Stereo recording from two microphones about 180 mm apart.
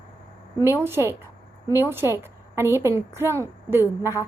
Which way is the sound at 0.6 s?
15° right (ahead or behind).